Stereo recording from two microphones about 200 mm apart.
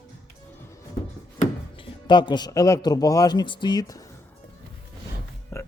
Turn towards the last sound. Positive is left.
turn(degrees=15)  # may be behind; listen again after turning